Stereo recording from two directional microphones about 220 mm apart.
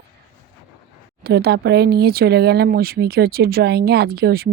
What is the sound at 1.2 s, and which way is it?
Speech, 45° right (ahead or behind).